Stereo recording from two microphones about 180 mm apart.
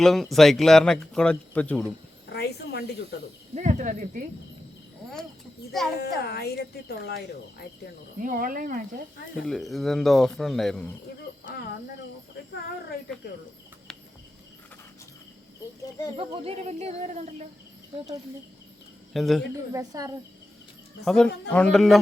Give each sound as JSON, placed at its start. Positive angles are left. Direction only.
{"t": 0.0, "sound": "speech", "side_deg": 0}
{"t": 2.3, "sound": "a sound", "side_deg": 65}
{"t": 3.5, "sound": "speech", "side_deg": -40}
{"t": 6.0, "sound": "speech", "side_deg": 65}
{"t": 8.2, "sound": "speech", "side_deg": -50}
{"t": 9.4, "sound": "speech", "side_deg": 0}
{"t": 16.1, "sound": "speech", "side_deg": -30}
{"t": 19.1, "sound": "speech", "side_deg": 0}
{"t": 19.5, "sound": "a woman's voice", "side_deg": -20}
{"t": 21.0, "sound": "speech", "side_deg": 5}